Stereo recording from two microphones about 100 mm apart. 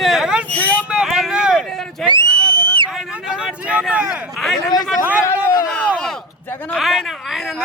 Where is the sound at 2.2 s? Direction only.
20° left (ahead or behind).